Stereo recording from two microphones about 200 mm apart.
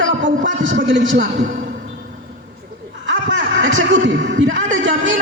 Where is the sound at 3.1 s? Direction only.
65° right (ahead or behind).